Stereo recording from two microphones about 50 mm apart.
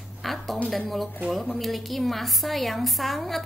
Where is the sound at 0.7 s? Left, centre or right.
Centre.